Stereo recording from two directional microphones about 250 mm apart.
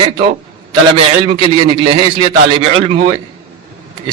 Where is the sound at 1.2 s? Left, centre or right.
Right.